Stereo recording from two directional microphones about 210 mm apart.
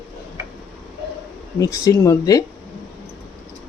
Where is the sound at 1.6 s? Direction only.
15° left (ahead or behind).